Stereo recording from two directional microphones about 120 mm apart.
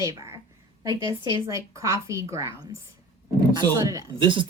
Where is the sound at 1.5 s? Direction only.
25° right (ahead or behind).